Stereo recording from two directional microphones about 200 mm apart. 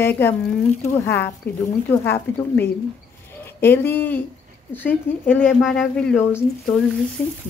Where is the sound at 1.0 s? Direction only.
10° left (ahead or behind).